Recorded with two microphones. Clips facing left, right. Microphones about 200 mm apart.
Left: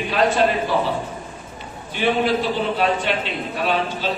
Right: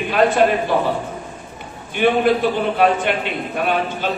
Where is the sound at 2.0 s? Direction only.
55° right (ahead or behind).